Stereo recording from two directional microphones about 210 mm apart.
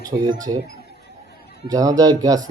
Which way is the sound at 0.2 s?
20° right (ahead or behind).